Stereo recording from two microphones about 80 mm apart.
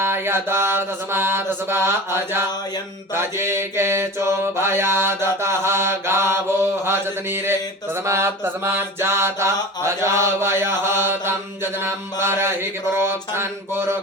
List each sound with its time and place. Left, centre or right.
0.0 s mantra: right